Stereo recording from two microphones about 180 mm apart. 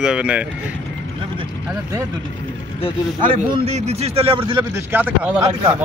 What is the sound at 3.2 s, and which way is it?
A man's voice, 35° right (ahead or behind).